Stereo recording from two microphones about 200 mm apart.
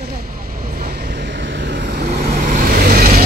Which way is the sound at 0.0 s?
50° right (ahead or behind).